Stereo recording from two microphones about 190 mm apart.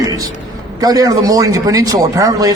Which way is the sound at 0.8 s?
20° right (ahead or behind).